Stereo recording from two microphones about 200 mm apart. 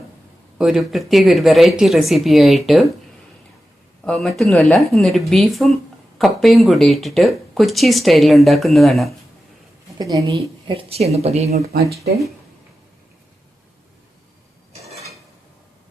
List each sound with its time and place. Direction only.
0.6 s speech: centre (ahead or behind)
4.0 s speech: centre (ahead or behind)
10.0 s a woman's voice: 15° right (ahead or behind)
10.3 s speech: 30° right (ahead or behind)
11.6 s speech: 50° right (ahead or behind)